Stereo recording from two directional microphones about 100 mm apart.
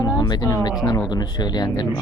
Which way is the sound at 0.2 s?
40° left (ahead or behind).